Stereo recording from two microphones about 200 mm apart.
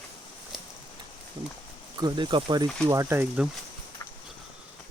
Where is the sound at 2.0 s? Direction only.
20° right (ahead or behind).